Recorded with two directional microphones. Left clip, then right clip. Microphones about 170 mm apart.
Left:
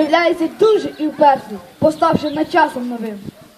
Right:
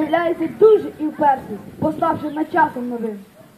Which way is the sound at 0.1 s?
20° left (ahead or behind).